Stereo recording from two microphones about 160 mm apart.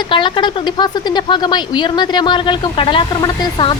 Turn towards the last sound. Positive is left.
turn(degrees=25)  # may be behind; listen again after turning